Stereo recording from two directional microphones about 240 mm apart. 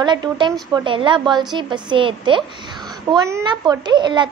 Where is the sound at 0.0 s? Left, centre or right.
Centre.